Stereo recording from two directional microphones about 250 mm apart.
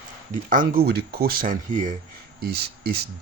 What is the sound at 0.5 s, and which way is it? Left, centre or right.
Speech, right.